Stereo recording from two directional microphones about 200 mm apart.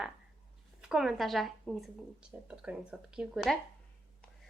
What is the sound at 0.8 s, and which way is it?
Speech, 5° right (ahead or behind).